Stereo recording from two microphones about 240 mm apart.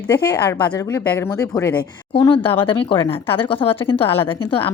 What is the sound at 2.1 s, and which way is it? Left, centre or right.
Speech, left.